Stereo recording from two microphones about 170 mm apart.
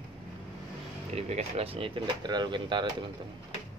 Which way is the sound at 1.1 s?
40° right (ahead or behind).